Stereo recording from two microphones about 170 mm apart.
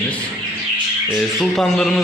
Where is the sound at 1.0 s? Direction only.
Centre (ahead or behind).